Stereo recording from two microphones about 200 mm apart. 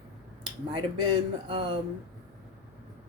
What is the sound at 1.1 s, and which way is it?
Speech, 25° right (ahead or behind).